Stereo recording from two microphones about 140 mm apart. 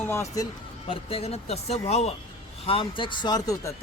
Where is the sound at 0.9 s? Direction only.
45° left (ahead or behind).